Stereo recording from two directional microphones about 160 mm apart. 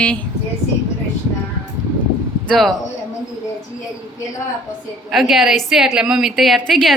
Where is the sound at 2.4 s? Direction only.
Centre (ahead or behind).